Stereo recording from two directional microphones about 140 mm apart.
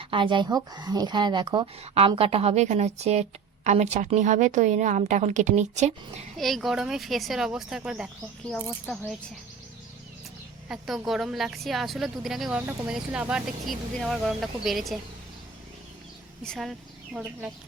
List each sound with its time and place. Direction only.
0.0 s speech: 40° right (ahead or behind)
1.8 s speech: 45° right (ahead or behind)
6.3 s a woman's voice: centre (ahead or behind)
10.7 s a woman's voice: centre (ahead or behind)
16.4 s a woman's voice: centre (ahead or behind)